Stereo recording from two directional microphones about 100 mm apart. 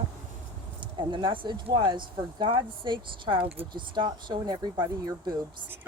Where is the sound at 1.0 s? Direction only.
50° right (ahead or behind).